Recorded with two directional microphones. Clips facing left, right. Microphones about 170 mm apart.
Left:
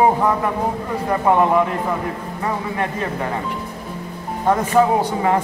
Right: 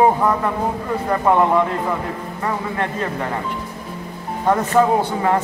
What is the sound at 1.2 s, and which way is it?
Speech, 10° left (ahead or behind).